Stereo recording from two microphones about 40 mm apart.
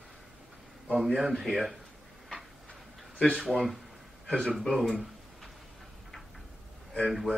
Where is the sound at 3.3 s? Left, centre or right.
Centre.